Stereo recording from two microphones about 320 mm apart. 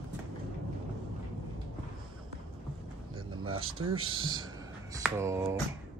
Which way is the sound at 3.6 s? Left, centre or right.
Right.